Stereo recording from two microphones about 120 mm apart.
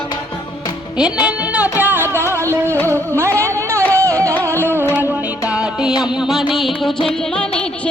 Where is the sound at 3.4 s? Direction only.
25° right (ahead or behind).